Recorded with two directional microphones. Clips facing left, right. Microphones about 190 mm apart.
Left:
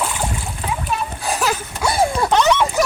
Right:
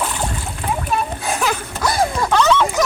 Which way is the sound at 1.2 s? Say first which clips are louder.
Even; centre (ahead or behind).